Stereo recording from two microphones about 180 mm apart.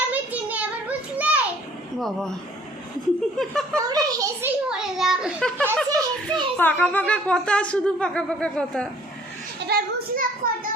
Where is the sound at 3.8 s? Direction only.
20° right (ahead or behind).